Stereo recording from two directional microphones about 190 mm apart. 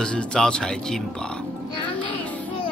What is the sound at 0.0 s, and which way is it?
Speech, 5° left (ahead or behind).